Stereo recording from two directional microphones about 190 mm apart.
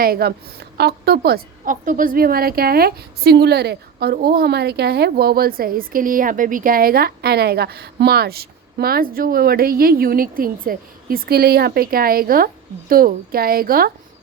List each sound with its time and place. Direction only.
0.0 s a woman's voice: 55° right (ahead or behind)